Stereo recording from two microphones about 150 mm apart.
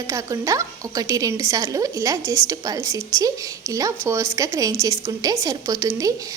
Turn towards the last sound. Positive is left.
turn(degrees=-20)  # may be behind; listen again after turning